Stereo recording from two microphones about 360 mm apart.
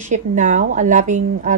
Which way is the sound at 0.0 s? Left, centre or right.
Right.